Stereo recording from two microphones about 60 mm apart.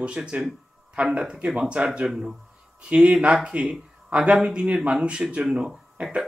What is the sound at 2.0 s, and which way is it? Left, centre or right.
Speech, centre.